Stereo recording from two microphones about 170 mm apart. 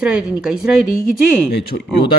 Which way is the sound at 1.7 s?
55° left (ahead or behind).